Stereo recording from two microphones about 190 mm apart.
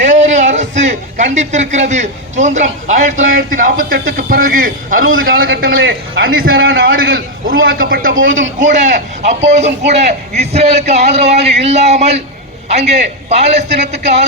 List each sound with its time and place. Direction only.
0.0 s a man's voice: 40° right (ahead or behind)
5.8 s a man's voice: 80° right
6.9 s a man's voice: 50° right (ahead or behind); by 14.3 s 35° right (ahead or behind)